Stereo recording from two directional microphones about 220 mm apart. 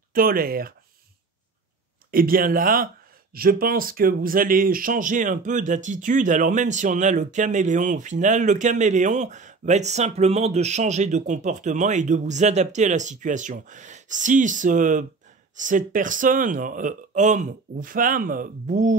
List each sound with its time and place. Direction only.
0.1 s speech: 40° right (ahead or behind)
2.0 s speech: 40° right (ahead or behind)